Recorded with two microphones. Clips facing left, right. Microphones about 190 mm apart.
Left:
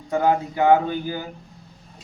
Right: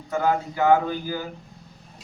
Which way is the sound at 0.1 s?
20° left (ahead or behind).